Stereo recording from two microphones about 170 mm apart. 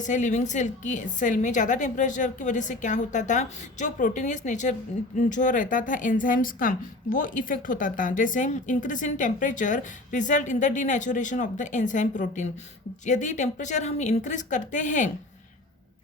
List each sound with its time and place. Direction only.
0.0 s a woman's voice: 45° left (ahead or behind)